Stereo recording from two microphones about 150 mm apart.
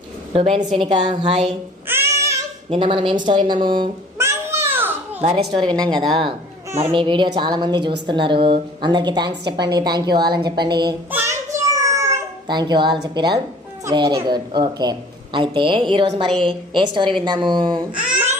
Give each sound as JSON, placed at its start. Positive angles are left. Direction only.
{"t": 0.3, "sound": "a woman's voice", "side_deg": -40}
{"t": 1.9, "sound": "child singing", "side_deg": -15}
{"t": 2.6, "sound": "a woman's voice", "side_deg": -35}
{"t": 4.2, "sound": "a sound", "side_deg": -15}
{"t": 5.5, "sound": "a woman's voice", "side_deg": -30}
{"t": 6.7, "sound": "a child's voice", "side_deg": -20}
{"t": 6.9, "sound": "a woman's voice", "side_deg": -35}
{"t": 11.1, "sound": "a sound", "side_deg": -20}
{"t": 13.1, "sound": "a woman's voice", "side_deg": -30}
{"t": 17.9, "sound": "babbling", "side_deg": -10}